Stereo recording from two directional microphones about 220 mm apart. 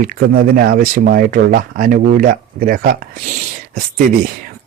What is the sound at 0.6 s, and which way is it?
Speech, 40° right (ahead or behind).